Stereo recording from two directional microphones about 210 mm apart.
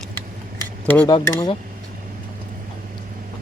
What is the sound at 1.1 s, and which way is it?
Speech, 20° left (ahead or behind).